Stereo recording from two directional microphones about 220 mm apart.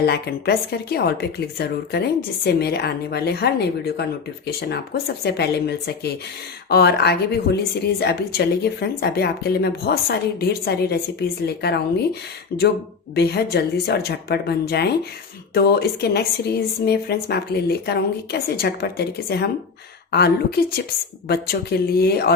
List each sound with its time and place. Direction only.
0.0 s a woman's voice: 45° left (ahead or behind)
13.1 s a woman's voice: 50° left (ahead or behind)